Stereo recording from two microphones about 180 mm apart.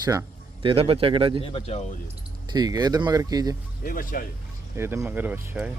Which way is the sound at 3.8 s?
50° left (ahead or behind).